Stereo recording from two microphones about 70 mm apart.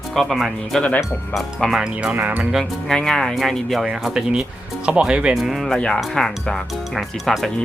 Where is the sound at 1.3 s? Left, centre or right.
Centre.